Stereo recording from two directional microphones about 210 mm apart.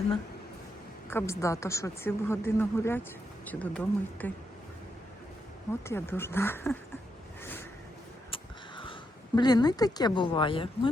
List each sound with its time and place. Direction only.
1.1 s a woman's voice: 15° left (ahead or behind)
5.8 s a woman's voice: 10° left (ahead or behind)
8.3 s a sound: 25° left (ahead or behind)